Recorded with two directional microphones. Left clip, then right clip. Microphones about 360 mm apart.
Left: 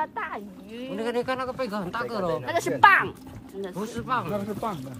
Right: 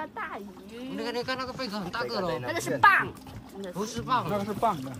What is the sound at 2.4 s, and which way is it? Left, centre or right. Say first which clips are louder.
Speech: left 3 dB; centre.